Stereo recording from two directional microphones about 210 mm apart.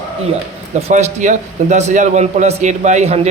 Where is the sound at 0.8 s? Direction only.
30° right (ahead or behind).